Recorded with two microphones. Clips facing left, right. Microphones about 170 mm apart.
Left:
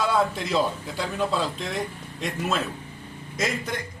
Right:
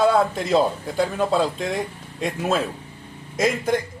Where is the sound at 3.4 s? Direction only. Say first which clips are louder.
Right 8 dB; 50° right (ahead or behind).